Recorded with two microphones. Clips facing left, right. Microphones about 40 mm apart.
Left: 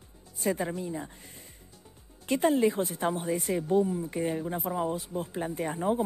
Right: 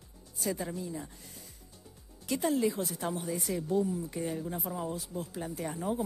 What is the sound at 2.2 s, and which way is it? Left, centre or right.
Speech, left.